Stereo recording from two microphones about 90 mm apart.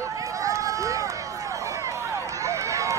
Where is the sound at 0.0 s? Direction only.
35° right (ahead or behind).